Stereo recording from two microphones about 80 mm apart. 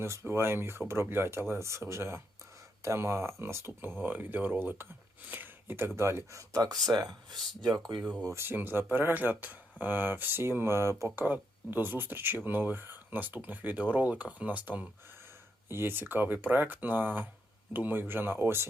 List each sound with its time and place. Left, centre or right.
0.0 s speech: right
7.1 s speech: right
8.2 s speech: right